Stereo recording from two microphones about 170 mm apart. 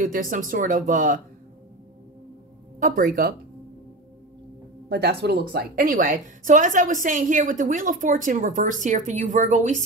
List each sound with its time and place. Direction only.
0.0 s a woman's voice: 50° right (ahead or behind)
2.8 s a woman's voice: 50° right (ahead or behind)
4.8 s a woman's voice: 80° right; by 9.8 s 45° right (ahead or behind)